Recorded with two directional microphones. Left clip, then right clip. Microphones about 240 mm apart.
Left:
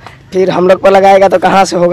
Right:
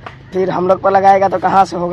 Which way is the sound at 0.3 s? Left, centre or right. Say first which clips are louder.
Left 6 dB; left.